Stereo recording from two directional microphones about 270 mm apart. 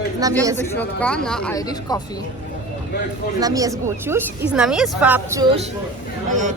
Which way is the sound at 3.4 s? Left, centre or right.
Centre.